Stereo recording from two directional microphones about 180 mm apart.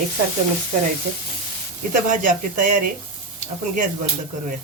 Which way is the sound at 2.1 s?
50° right (ahead or behind).